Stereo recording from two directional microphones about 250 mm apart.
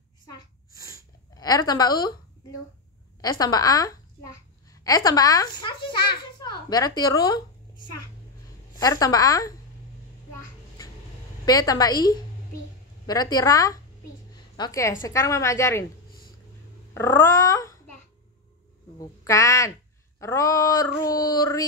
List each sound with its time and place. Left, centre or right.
1.3 s a woman's voice: centre
3.2 s a woman's voice: centre
8.7 s speech: centre
11.4 s a woman's voice: centre
16.9 s speech: centre
18.9 s speech: centre